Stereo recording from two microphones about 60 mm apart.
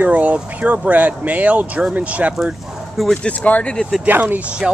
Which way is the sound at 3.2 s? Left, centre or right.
Left.